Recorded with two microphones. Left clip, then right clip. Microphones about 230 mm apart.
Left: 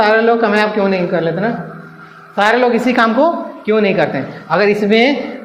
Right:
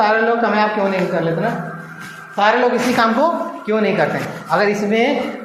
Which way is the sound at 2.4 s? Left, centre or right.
Left.